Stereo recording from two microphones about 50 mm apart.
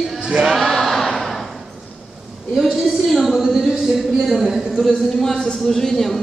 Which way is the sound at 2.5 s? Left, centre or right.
Centre.